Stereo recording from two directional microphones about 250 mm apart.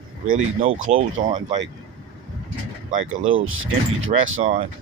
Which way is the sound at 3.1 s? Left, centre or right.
Right.